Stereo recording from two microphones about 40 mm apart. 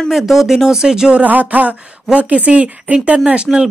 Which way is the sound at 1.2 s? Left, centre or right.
Right.